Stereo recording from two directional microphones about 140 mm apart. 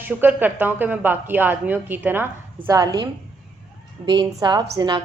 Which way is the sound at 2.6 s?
25° right (ahead or behind).